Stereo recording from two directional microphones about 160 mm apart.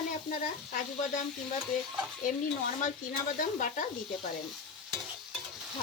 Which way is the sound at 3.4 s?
55° left (ahead or behind).